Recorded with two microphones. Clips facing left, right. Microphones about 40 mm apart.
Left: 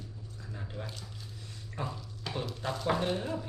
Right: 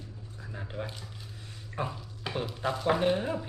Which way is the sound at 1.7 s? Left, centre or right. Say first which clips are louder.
Right 4 dB; centre.